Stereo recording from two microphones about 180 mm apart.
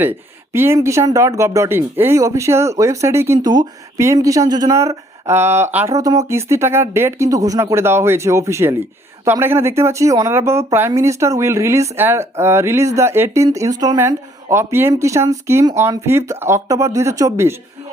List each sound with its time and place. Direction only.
0.0 s speech: 10° right (ahead or behind)